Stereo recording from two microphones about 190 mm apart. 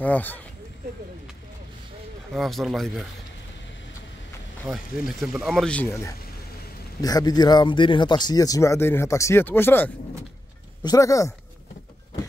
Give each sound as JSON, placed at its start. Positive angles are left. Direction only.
{"t": 0.0, "sound": "speech", "side_deg": 10}
{"t": 2.3, "sound": "speech", "side_deg": 0}
{"t": 4.6, "sound": "speech", "side_deg": 0}